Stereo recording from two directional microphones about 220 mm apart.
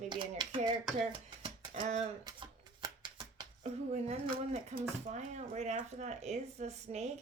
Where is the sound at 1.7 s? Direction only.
30° right (ahead or behind).